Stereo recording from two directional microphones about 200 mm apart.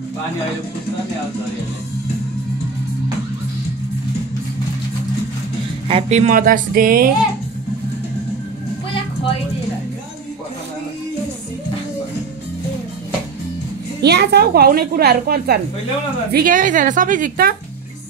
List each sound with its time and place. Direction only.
5.9 s a woman's voice: 30° right (ahead or behind); by 7.1 s 45° right (ahead or behind)
14.0 s a woman's voice: 55° right (ahead or behind)